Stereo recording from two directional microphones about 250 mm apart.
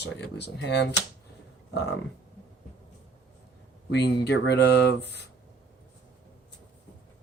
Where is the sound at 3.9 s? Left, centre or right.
Left.